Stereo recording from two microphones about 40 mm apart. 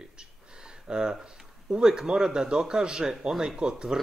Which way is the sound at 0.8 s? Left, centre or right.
Centre.